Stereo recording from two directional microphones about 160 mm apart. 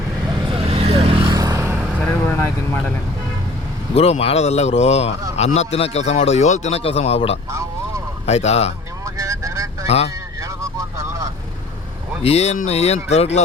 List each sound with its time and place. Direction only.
0.4 s vehicle: 35° right (ahead or behind)
1.4 s vehicle: 20° right (ahead or behind)
2.2 s speech: 15° left (ahead or behind)
3.9 s speech: 40° left (ahead or behind)
9.0 s vehicle: 20° right (ahead or behind)
9.8 s speech: 40° left (ahead or behind)
10.4 s vehicle: 20° right (ahead or behind)
12.2 s speech: 40° left (ahead or behind)